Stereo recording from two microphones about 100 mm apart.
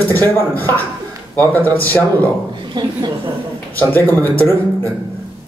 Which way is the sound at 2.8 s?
50° right (ahead or behind).